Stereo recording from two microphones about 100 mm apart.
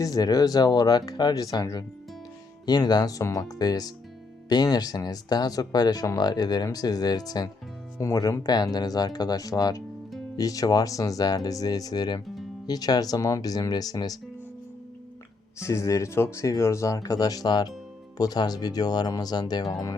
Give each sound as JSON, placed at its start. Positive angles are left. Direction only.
{"t": 0.0, "sound": "speech", "side_deg": 40}
{"t": 15.5, "sound": "speech", "side_deg": 30}